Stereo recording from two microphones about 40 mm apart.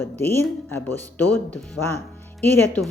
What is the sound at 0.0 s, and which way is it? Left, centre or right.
Speech, left.